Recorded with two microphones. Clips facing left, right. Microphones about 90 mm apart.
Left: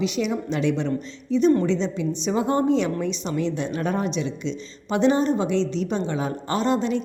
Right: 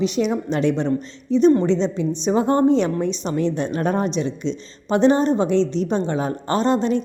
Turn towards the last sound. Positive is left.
turn(degrees=-40)  # may be behind; listen again after turning